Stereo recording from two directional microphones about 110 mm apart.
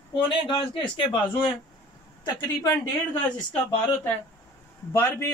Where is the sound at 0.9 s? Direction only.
50° left (ahead or behind).